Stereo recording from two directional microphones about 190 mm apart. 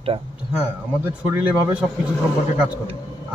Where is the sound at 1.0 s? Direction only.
10° right (ahead or behind).